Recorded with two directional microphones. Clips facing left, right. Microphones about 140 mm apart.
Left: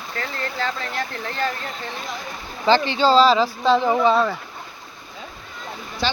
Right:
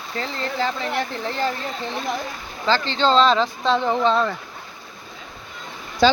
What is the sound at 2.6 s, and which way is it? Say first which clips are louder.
Speech: left 3 dB; 15° left (ahead or behind).